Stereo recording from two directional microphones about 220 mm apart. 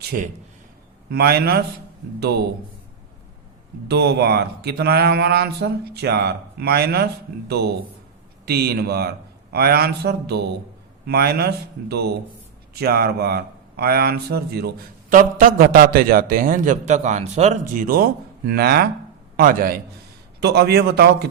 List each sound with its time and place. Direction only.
1.1 s speech: 45° right (ahead or behind)
3.8 s a man's voice: 50° right (ahead or behind); by 17.8 s 30° right (ahead or behind)
17.8 s a man's voice: 45° right (ahead or behind)